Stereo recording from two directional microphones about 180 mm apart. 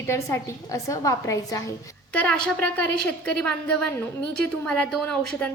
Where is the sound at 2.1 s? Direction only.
5° left (ahead or behind).